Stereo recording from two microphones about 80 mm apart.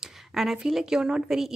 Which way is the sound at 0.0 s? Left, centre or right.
Centre.